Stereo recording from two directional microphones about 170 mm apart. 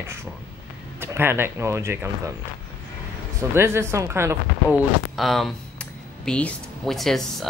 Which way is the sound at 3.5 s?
15° right (ahead or behind).